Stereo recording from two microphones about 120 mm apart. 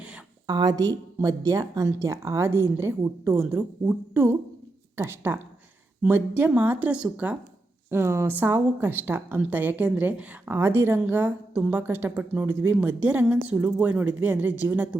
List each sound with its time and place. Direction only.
0.4 s a woman's voice: 35° right (ahead or behind); by 14.5 s 15° right (ahead or behind)